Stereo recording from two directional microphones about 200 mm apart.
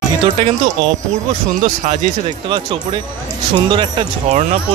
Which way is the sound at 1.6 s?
35° right (ahead or behind).